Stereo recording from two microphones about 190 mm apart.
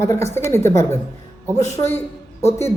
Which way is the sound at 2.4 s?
15° left (ahead or behind).